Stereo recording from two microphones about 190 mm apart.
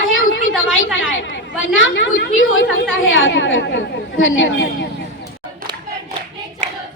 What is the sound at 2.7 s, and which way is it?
A woman's voice, 90° left.